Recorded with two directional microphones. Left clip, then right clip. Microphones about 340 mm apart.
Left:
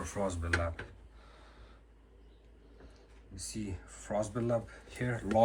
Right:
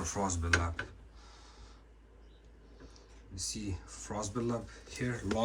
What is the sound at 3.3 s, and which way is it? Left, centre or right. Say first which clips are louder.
Speech: right 3 dB; centre.